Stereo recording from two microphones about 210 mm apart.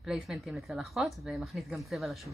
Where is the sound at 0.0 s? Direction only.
Centre (ahead or behind).